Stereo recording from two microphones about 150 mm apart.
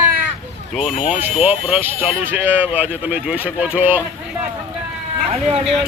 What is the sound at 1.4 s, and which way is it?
Speech, 10° right (ahead or behind).